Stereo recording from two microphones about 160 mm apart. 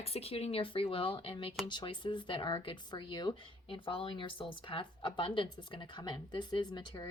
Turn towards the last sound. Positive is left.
turn(degrees=25)  # may be behind; listen again after turning